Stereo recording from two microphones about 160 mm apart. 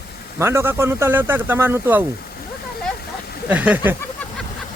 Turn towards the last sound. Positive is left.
turn(degrees=-10)  # may be behind; listen again after turning